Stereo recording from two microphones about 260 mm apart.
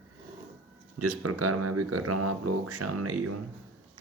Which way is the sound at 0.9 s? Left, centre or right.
Right.